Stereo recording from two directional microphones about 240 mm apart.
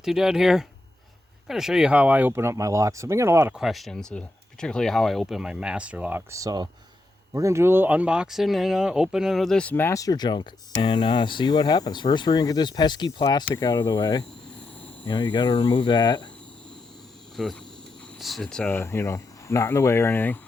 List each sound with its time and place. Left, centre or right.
0.0 s speech: centre
17.3 s cricket: centre
18.2 s speech: centre